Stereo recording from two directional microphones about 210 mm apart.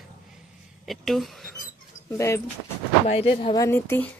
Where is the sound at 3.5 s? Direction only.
10° left (ahead or behind).